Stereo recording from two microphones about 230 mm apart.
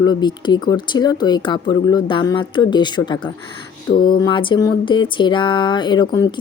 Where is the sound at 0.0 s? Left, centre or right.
Centre.